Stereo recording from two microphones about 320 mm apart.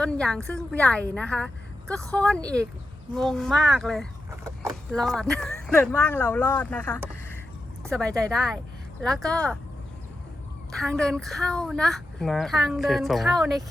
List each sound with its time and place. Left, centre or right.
0.0 s speech: centre
10.7 s speech: centre